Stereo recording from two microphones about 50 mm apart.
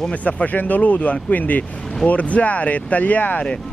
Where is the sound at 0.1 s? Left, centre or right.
Left.